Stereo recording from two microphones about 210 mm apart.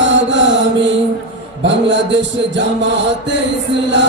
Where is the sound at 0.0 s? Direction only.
60° right (ahead or behind).